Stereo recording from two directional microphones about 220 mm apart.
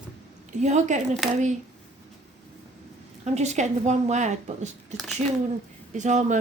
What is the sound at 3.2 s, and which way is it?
Speech, 30° right (ahead or behind).